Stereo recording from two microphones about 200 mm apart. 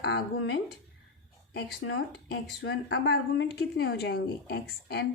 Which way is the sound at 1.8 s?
60° left (ahead or behind).